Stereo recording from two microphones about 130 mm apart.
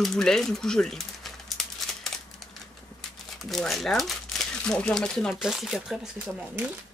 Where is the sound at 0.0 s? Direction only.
5° left (ahead or behind).